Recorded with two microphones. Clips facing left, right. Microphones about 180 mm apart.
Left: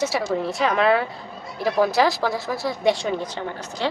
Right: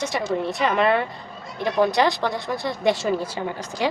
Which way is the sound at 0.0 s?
5° left (ahead or behind).